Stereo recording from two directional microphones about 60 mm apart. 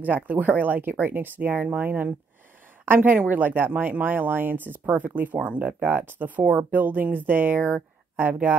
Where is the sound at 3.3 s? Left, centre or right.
Right.